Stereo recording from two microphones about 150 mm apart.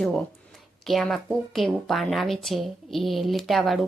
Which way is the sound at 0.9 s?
Centre (ahead or behind).